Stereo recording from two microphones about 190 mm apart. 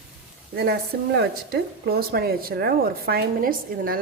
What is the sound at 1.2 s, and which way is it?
Speech, 55° right (ahead or behind).